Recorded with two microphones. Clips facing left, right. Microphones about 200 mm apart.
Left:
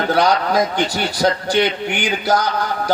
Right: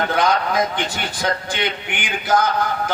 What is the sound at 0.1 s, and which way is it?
A man's voice, 35° left (ahead or behind).